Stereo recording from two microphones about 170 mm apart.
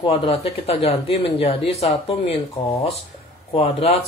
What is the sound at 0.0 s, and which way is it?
Speech, 30° left (ahead or behind).